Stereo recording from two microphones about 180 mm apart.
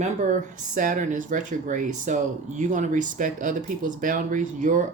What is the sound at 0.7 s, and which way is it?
Speech, 45° right (ahead or behind).